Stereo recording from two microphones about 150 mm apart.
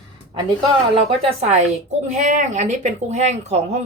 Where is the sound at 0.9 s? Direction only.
45° right (ahead or behind).